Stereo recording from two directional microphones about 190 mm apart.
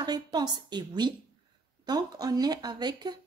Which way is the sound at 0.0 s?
20° right (ahead or behind).